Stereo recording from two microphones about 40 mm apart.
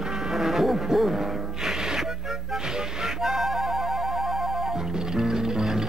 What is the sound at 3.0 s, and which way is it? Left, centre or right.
Music, centre.